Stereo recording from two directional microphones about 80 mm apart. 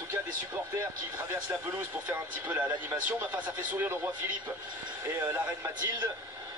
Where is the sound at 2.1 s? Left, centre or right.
Right.